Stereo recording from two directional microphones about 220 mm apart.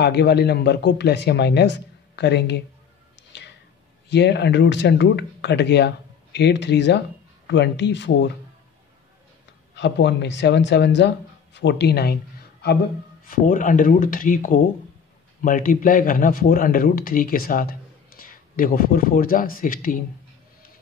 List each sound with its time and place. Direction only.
0.0 s speech: 50° left (ahead or behind)
3.3 s music: 55° left (ahead or behind)
4.1 s speech: 50° left (ahead or behind)
9.8 s speech: 50° left (ahead or behind)
13.2 s speech: 40° left (ahead or behind)